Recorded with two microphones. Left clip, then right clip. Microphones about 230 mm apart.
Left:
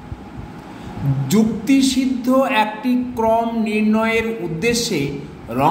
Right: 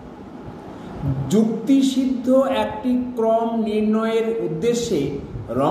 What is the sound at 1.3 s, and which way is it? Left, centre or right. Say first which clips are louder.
Speech: left 1 dB; left.